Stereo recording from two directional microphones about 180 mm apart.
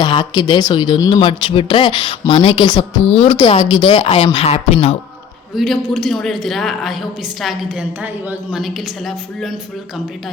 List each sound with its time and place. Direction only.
0.0 s speech: 25° left (ahead or behind)
3.1 s speech: 35° left (ahead or behind)
3.3 s speech: 25° left (ahead or behind)
5.5 s speech: centre (ahead or behind)